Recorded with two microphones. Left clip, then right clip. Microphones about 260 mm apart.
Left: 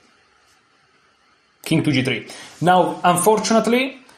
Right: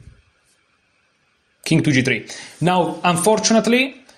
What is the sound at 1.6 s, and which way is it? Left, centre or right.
Speech, right.